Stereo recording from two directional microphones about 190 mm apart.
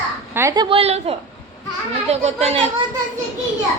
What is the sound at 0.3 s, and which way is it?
A woman's voice, 20° right (ahead or behind).